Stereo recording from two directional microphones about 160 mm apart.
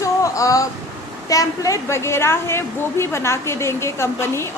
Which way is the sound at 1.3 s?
20° left (ahead or behind).